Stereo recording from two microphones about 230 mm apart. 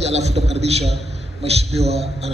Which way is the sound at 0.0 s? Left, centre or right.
Right.